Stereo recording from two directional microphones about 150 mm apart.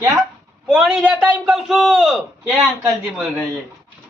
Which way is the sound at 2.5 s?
15° right (ahead or behind).